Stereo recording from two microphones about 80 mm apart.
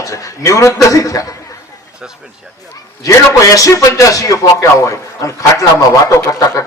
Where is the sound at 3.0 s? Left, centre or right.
Left.